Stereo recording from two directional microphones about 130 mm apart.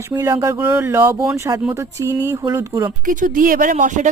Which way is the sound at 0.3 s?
20° right (ahead or behind).